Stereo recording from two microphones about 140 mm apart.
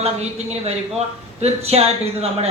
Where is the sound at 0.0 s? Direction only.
50° right (ahead or behind).